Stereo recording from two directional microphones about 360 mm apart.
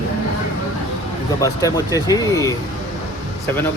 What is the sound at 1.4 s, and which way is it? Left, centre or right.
Speech, centre.